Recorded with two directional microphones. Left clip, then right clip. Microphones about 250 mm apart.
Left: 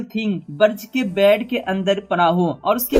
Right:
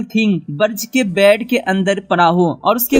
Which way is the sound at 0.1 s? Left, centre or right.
Right.